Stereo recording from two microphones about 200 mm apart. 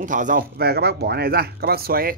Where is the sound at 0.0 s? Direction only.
40° right (ahead or behind).